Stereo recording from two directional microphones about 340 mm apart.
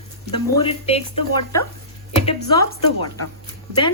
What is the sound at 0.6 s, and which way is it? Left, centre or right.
Speech, centre.